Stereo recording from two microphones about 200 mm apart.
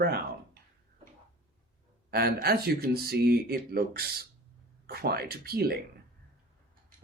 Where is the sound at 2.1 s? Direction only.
50° right (ahead or behind).